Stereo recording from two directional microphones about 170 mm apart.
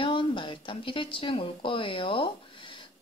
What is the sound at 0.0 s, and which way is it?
Speech, 30° left (ahead or behind).